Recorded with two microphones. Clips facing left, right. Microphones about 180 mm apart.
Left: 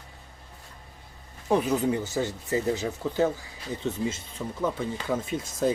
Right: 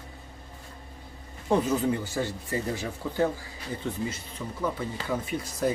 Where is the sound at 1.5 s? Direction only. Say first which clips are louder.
Left 1 dB; 15° left (ahead or behind).